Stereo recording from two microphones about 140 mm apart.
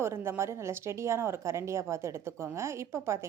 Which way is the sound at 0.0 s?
20° right (ahead or behind).